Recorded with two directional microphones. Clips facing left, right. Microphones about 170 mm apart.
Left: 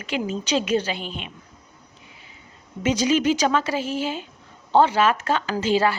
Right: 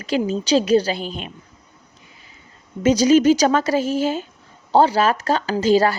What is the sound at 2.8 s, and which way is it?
A woman's voice, 40° right (ahead or behind).